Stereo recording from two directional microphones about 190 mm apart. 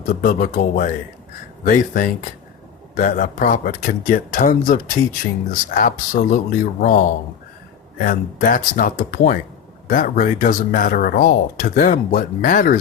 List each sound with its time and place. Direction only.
0.1 s speech: 50° left (ahead or behind)
8.0 s speech: 50° left (ahead or behind)